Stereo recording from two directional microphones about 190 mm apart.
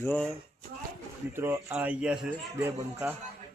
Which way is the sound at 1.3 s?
10° right (ahead or behind).